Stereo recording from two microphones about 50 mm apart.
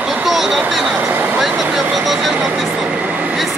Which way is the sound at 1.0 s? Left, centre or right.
Right.